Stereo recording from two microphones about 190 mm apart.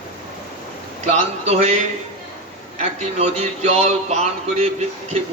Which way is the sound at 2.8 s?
35° right (ahead or behind).